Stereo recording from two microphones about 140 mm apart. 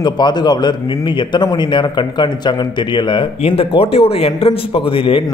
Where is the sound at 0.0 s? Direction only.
30° left (ahead or behind).